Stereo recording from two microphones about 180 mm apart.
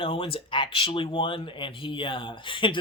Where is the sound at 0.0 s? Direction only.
30° left (ahead or behind).